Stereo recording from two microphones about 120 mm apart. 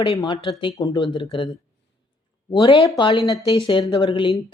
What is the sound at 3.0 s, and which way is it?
A woman's voice, 40° left (ahead or behind).